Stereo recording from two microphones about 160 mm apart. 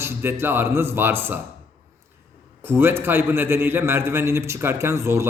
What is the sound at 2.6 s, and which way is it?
A man's voice, 15° right (ahead or behind).